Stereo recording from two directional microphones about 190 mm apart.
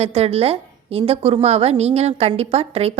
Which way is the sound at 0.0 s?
30° right (ahead or behind).